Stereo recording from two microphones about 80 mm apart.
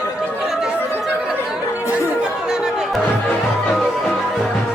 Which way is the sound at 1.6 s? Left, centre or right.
Left.